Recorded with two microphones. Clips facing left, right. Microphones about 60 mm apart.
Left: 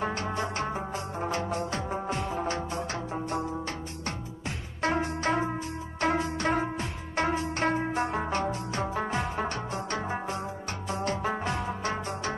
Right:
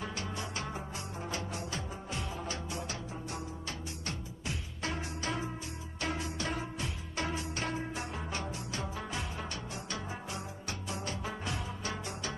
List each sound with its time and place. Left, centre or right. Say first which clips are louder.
0.0 s music: left 9 dB; left